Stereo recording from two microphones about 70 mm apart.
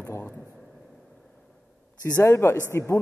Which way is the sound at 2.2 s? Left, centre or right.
Left.